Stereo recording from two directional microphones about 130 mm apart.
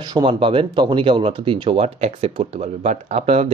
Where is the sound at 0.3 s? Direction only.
45° right (ahead or behind).